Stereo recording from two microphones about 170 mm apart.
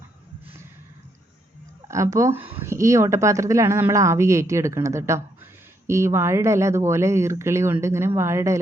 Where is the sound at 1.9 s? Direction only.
20° right (ahead or behind).